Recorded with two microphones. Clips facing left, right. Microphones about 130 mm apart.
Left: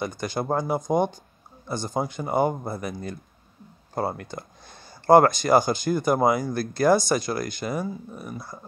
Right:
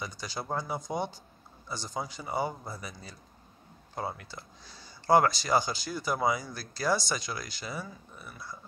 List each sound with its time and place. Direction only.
0.0 s speech: 55° left (ahead or behind)